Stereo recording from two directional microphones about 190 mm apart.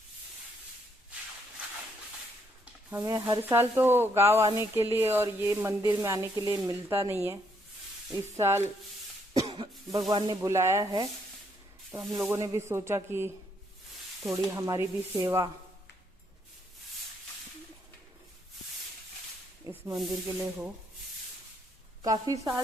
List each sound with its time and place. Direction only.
2.9 s speech: 15° right (ahead or behind)
9.3 s cough: 20° right (ahead or behind)
10.1 s speech: 25° right (ahead or behind)
12.1 s speech: 15° right (ahead or behind)
14.3 s speech: 15° right (ahead or behind)
19.7 s rub: 15° right (ahead or behind)
20.2 s speech: 10° right (ahead or behind)
22.0 s speech: 20° right (ahead or behind)